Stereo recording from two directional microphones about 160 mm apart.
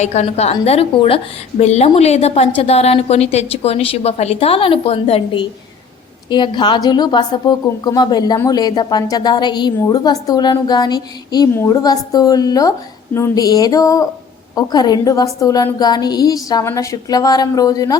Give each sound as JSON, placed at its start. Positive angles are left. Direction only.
{"t": 0.0, "sound": "a woman's voice", "side_deg": 45}